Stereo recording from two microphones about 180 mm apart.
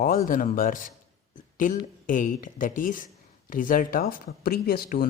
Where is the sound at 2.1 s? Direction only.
50° left (ahead or behind).